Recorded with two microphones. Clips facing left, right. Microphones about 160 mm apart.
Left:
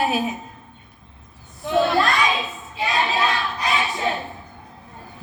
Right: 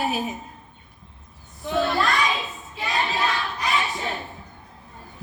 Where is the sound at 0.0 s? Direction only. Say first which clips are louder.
Left 4 dB; 90° left.